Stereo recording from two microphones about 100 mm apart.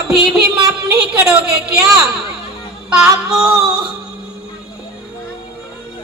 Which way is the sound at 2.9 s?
10° right (ahead or behind).